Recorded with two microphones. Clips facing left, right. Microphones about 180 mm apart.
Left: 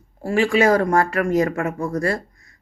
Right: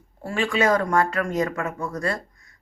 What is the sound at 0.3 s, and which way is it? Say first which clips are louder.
A woman's voice: left 5 dB; 25° left (ahead or behind).